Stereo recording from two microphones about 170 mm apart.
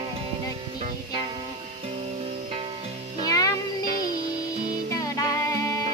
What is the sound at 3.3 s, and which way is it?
Music, 20° left (ahead or behind).